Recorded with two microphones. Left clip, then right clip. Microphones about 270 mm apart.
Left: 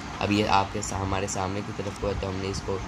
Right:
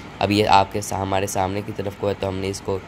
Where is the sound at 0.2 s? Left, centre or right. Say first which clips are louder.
Right 7 dB; right.